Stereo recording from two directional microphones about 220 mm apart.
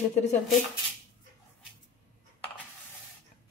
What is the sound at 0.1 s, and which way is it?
Speech, 30° left (ahead or behind).